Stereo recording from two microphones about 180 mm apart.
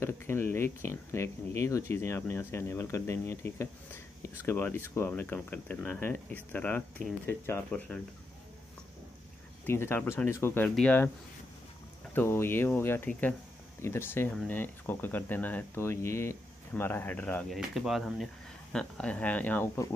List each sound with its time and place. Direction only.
0.0 s speech: 15° left (ahead or behind)
9.7 s speech: 15° left (ahead or behind)
12.1 s speech: 10° left (ahead or behind)